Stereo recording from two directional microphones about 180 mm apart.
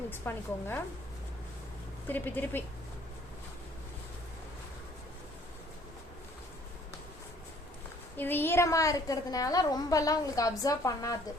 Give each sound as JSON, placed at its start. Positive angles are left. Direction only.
{"t": 0.1, "sound": "a woman's voice", "side_deg": 10}
{"t": 2.0, "sound": "a woman's voice", "side_deg": 10}
{"t": 8.1, "sound": "a woman's voice", "side_deg": 10}